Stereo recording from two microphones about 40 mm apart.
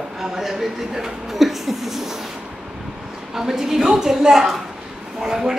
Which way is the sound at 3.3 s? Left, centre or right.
Centre.